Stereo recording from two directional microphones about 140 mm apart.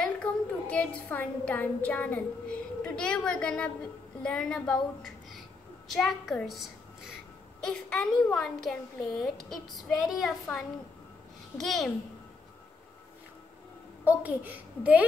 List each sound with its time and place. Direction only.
0.0 s a child's voice: 10° left (ahead or behind)
14.0 s a woman's voice: 10° right (ahead or behind)